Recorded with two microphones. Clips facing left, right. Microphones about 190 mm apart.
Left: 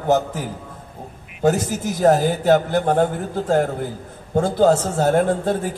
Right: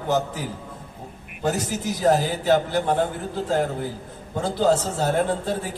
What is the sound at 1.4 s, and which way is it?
A man's voice, 50° left (ahead or behind).